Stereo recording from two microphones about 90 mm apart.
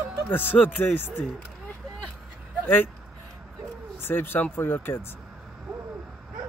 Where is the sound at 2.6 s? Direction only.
20° left (ahead or behind).